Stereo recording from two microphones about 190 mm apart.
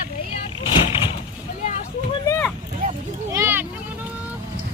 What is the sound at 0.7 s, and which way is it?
Vehicle, 25° left (ahead or behind).